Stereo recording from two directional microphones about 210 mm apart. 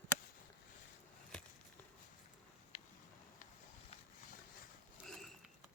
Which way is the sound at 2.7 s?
30° left (ahead or behind).